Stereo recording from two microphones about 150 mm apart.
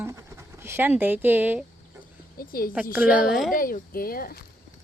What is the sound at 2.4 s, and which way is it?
Speech, 75° left (ahead or behind).